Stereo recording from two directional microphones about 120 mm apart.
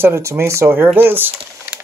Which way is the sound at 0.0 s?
20° right (ahead or behind).